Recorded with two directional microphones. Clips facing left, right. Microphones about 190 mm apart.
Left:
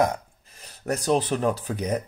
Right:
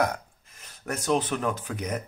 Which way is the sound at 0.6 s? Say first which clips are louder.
Left 5 dB; 35° left (ahead or behind).